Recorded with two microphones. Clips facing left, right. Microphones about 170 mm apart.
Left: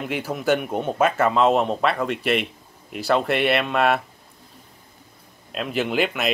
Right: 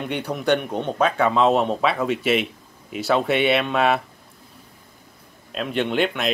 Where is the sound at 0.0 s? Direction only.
Centre (ahead or behind).